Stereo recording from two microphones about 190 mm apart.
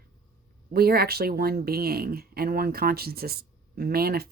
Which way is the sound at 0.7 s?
55° right (ahead or behind).